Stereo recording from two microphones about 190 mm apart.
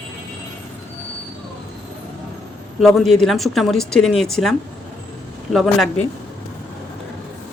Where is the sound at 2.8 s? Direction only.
Centre (ahead or behind).